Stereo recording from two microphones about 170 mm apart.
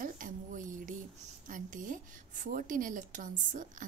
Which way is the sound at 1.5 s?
50° right (ahead or behind).